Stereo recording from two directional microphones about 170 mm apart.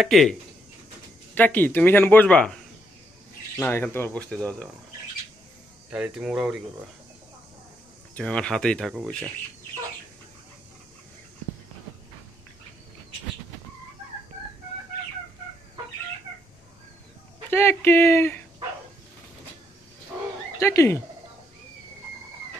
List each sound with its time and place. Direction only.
0.0 s speech: centre (ahead or behind)
1.3 s speech: 10° left (ahead or behind)
5.9 s speech: 5° right (ahead or behind)
8.1 s speech: 5° left (ahead or behind)
17.5 s speech: 15° left (ahead or behind)
20.5 s speech: 15° left (ahead or behind)